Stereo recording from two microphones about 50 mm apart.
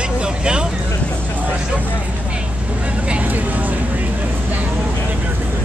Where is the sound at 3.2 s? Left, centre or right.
Right.